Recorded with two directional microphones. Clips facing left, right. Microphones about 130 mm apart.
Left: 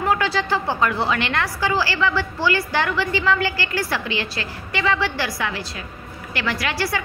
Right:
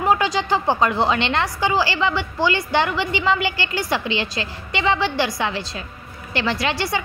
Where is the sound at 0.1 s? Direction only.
20° right (ahead or behind).